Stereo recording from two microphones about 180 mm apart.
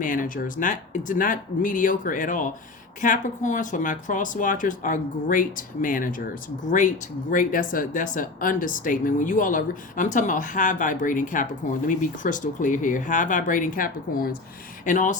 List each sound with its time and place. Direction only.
0.0 s speech: 45° left (ahead or behind)